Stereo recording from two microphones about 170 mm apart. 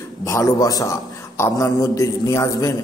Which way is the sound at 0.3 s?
20° left (ahead or behind).